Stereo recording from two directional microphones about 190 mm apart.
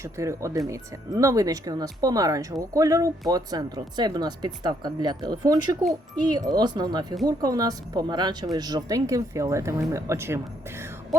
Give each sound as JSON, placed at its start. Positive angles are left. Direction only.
{"t": 0.0, "sound": "speech", "side_deg": -15}